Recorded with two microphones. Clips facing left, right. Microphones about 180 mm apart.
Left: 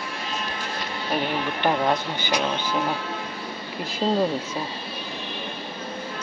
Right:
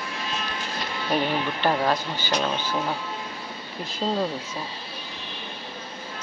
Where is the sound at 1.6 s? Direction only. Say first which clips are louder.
Left 2 dB; 15° left (ahead or behind).